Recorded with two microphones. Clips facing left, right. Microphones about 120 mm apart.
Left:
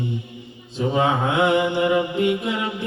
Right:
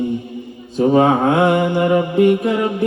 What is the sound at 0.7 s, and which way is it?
Mantra, 45° right (ahead or behind).